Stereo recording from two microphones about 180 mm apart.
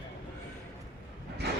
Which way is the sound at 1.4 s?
70° right (ahead or behind).